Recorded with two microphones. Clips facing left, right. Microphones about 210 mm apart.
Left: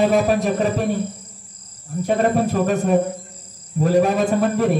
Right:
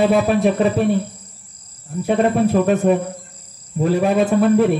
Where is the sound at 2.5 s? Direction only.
45° left (ahead or behind).